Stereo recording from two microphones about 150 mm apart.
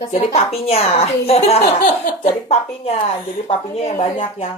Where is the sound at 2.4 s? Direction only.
45° left (ahead or behind).